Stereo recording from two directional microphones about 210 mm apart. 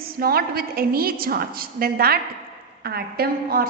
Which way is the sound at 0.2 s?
45° right (ahead or behind).